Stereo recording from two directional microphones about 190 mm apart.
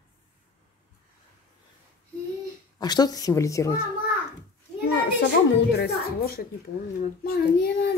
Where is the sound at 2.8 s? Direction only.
20° left (ahead or behind).